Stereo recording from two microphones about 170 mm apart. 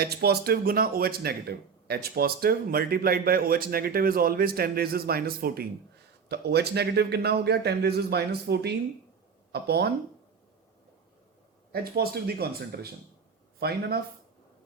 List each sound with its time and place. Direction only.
0.0 s speech: 70° right (ahead or behind)
11.7 s speech: 65° right (ahead or behind)